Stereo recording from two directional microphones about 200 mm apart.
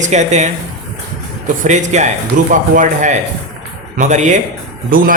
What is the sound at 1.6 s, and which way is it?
Speech, 35° right (ahead or behind).